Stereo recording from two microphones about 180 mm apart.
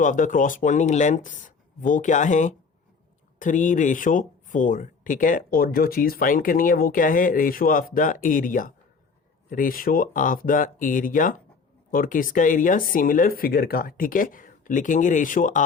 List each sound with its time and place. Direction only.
0.0 s speech: 45° left (ahead or behind)